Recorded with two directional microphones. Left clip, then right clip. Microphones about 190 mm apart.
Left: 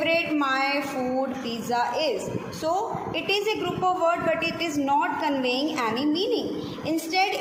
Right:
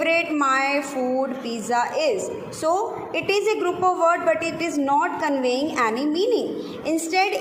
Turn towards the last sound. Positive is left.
turn(degrees=-25)  # may be behind; listen again after turning